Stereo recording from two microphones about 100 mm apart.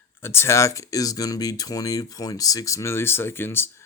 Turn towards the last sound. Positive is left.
turn(degrees=25)  # may be behind; listen again after turning